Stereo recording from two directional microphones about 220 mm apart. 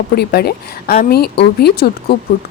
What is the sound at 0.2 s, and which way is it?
A woman's voice, 45° left (ahead or behind).